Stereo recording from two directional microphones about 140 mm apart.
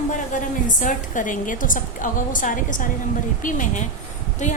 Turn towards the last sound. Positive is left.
turn(degrees=60)  # may be behind; listen again after turning